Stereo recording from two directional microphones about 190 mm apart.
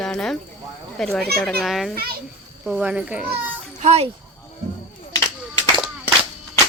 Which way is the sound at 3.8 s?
35° right (ahead or behind).